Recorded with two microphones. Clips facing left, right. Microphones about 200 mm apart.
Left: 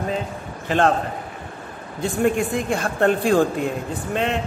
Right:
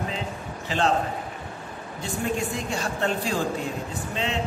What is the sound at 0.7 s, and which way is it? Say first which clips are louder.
Speech: left 5 dB; 55° left (ahead or behind).